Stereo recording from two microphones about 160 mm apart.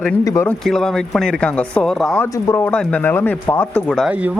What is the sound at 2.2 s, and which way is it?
Speech, 15° left (ahead or behind).